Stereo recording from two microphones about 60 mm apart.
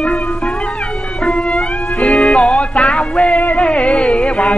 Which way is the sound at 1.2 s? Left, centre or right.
Centre.